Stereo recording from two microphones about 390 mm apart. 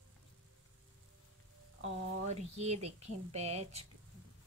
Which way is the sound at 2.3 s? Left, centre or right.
Centre.